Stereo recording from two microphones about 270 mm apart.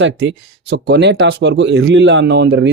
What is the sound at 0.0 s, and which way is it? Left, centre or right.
Speech, right.